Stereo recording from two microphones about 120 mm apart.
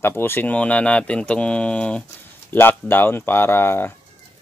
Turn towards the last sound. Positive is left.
turn(degrees=20)  # may be behind; listen again after turning